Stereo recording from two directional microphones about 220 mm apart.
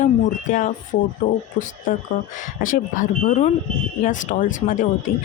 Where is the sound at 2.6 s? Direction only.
35° left (ahead or behind).